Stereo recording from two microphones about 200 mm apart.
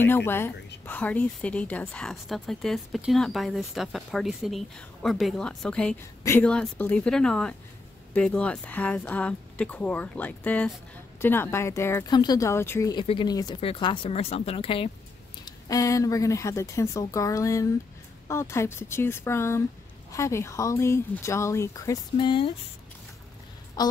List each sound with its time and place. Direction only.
0.0 s speech: 10° left (ahead or behind)
13.0 s speech: 25° left (ahead or behind)
15.4 s speech: 15° left (ahead or behind)
23.8 s speech: 20° left (ahead or behind)